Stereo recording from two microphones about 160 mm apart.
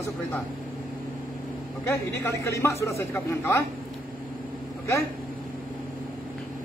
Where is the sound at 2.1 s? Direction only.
20° left (ahead or behind).